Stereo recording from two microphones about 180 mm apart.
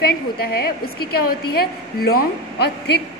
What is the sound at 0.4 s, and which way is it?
A woman's voice, 60° left (ahead or behind).